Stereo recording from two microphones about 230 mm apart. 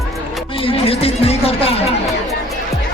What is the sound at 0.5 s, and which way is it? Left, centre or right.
Chatter, left.